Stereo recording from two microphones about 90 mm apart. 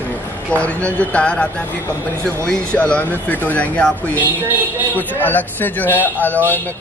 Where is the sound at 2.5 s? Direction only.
15° left (ahead or behind).